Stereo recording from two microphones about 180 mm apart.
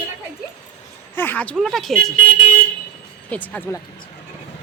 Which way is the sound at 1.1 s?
10° left (ahead or behind).